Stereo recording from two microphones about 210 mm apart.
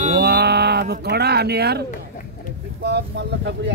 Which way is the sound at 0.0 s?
45° right (ahead or behind).